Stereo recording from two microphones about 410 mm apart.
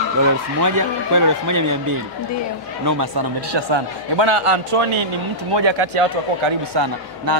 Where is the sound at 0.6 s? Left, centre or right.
Right.